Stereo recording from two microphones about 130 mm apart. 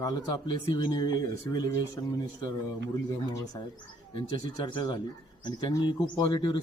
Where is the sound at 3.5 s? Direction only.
35° left (ahead or behind).